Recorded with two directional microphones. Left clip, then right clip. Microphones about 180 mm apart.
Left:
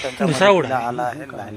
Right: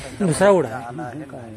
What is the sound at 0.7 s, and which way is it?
Speech, 30° left (ahead or behind).